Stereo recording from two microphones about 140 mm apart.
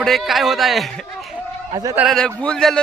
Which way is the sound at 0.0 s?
Centre (ahead or behind).